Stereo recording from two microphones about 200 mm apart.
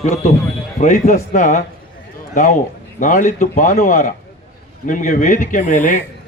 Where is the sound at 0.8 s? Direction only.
40° left (ahead or behind).